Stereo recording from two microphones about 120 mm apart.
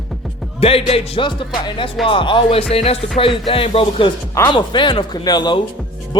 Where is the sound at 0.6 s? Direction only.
55° left (ahead or behind); by 5.6 s 35° left (ahead or behind).